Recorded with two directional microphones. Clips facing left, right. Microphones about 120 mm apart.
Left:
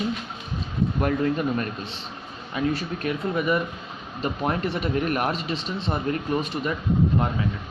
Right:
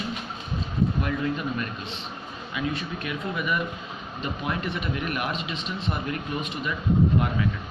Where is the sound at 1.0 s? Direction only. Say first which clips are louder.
Left 5 dB; 45° left (ahead or behind).